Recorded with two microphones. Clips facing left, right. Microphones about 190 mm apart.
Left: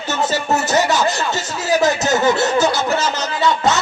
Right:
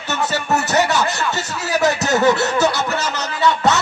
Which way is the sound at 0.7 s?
65° right (ahead or behind).